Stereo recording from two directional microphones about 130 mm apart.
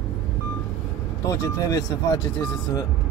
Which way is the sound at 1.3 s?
30° left (ahead or behind).